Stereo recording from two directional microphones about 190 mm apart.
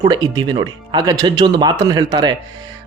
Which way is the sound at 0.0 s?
20° right (ahead or behind).